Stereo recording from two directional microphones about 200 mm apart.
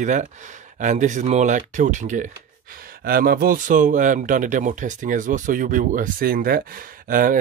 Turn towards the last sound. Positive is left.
turn(degrees=-45)  # may be behind; listen again after turning